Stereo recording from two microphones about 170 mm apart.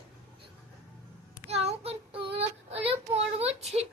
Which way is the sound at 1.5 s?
35° right (ahead or behind).